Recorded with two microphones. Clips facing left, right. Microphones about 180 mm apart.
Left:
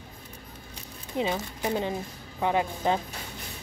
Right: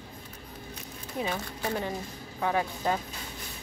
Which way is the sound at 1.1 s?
20° left (ahead or behind).